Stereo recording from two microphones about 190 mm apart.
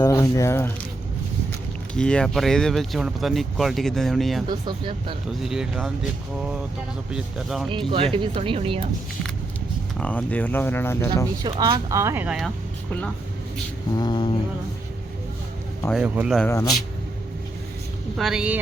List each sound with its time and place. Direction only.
0.0 s speech: 15° left (ahead or behind)
2.0 s speech: 5° left (ahead or behind)
4.6 s speech: 25° right (ahead or behind)
5.4 s speech: centre (ahead or behind)
7.1 s speech: centre (ahead or behind)
8.1 s speech: 25° right (ahead or behind)
10.0 s speech: 5° left (ahead or behind)
11.4 s speech: 25° right (ahead or behind); by 12.5 s 5° right (ahead or behind)
13.9 s mantra: 20° left (ahead or behind)
15.9 s speech: 5° right (ahead or behind)
16.4 s speech: 15° left (ahead or behind)
18.2 s speech: 5° right (ahead or behind)